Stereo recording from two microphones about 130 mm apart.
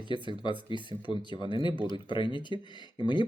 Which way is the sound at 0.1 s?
35° left (ahead or behind).